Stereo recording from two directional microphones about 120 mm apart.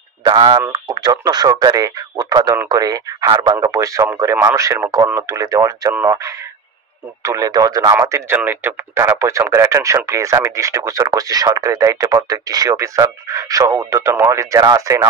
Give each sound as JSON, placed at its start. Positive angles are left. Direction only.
{"t": 0.2, "sound": "speech", "side_deg": -40}